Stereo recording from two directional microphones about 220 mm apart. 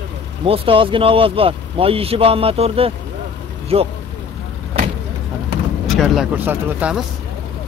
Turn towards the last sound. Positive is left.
turn(degrees=-5)  # may be behind; listen again after turning